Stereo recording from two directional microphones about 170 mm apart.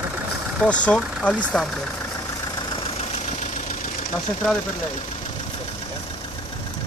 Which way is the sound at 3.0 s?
40° left (ahead or behind).